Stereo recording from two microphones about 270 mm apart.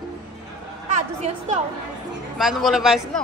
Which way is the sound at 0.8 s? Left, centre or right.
Right.